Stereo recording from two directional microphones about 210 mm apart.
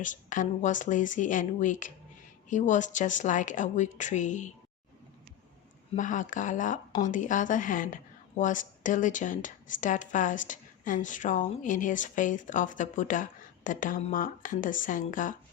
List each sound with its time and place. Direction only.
0.0 s a woman's voice: 40° left (ahead or behind)
5.9 s a woman's voice: 40° left (ahead or behind)